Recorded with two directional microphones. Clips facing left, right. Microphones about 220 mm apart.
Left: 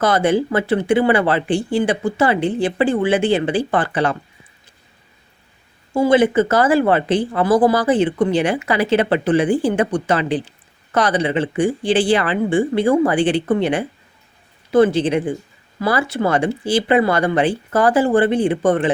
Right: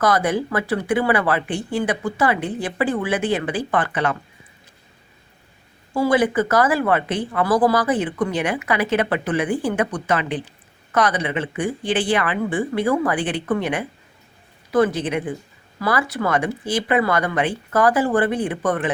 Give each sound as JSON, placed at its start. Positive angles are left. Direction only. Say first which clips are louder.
{"t": 0.0, "sound": "speech", "louder": "left 3 dB", "side_deg": 25}
{"t": 5.9, "sound": "speech", "louder": "left 4 dB", "side_deg": 25}